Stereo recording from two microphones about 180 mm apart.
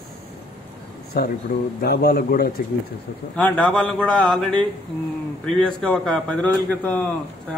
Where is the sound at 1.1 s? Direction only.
60° left (ahead or behind).